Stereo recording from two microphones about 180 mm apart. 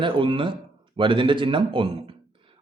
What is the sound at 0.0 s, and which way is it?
A man's voice, 30° right (ahead or behind).